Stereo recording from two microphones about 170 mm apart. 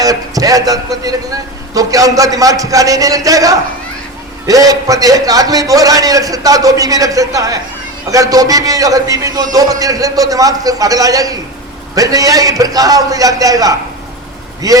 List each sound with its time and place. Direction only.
0.0 s a man's voice: 20° right (ahead or behind)